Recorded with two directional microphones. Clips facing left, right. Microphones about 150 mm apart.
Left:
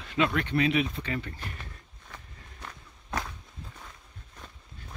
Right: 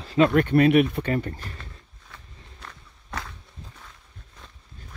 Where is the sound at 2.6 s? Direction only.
10° left (ahead or behind).